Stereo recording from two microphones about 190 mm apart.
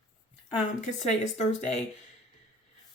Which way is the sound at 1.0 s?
40° left (ahead or behind).